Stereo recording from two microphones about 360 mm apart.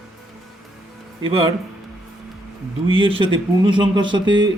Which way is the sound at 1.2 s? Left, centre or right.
Centre.